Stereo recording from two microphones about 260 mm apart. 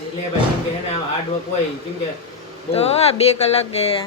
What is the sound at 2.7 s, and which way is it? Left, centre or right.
Speech, left.